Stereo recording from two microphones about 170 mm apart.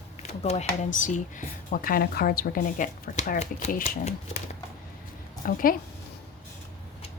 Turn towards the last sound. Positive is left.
turn(degrees=55)  # may be behind; listen again after turning